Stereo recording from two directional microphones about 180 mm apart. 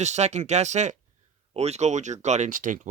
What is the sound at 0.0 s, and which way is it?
Speech, 40° right (ahead or behind).